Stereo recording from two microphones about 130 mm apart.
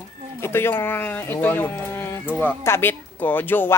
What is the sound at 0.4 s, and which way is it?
Speech, 20° left (ahead or behind).